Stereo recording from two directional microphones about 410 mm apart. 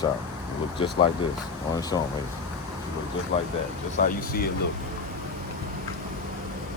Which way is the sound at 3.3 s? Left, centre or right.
Centre.